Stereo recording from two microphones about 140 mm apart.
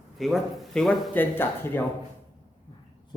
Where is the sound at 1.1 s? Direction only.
15° left (ahead or behind).